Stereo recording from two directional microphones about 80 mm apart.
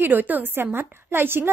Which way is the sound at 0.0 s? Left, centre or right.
Right.